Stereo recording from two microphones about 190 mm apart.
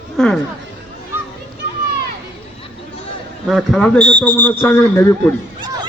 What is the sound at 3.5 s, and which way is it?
Speech, centre (ahead or behind).